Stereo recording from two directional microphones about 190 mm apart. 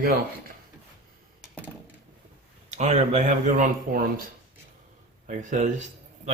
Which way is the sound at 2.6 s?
35° right (ahead or behind).